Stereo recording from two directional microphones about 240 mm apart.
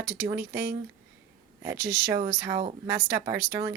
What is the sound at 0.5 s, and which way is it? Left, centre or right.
Speech, right.